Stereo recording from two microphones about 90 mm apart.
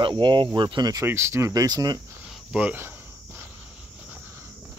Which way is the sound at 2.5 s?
20° right (ahead or behind).